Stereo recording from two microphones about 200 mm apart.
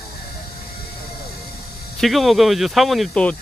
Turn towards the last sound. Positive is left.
turn(degrees=0)  # may be behind; listen again after turning